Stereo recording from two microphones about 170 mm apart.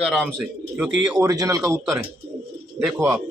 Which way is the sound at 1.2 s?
20° right (ahead or behind).